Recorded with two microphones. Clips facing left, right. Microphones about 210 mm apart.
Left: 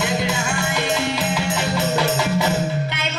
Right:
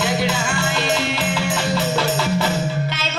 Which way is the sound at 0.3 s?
20° left (ahead or behind).